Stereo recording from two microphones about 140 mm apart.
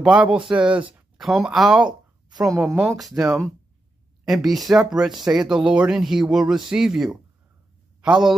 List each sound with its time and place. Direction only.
0.0 s speech: 5° right (ahead or behind)
2.2 s a woman's voice: 25° right (ahead or behind)
2.6 s a man's voice: centre (ahead or behind)